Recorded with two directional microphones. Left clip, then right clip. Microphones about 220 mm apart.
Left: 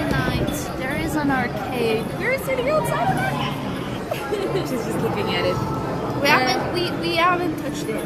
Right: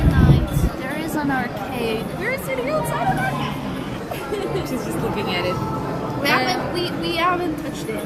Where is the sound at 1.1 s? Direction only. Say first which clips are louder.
Even; 10° left (ahead or behind).